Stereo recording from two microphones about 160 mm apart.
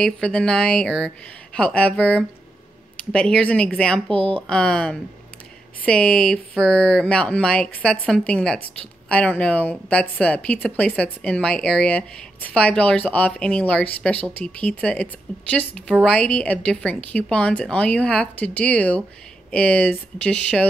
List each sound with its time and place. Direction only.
0.0 s a woman's voice: 5° left (ahead or behind)
4.1 s speech: 35° right (ahead or behind)
4.4 s a woman's voice: 5° left (ahead or behind)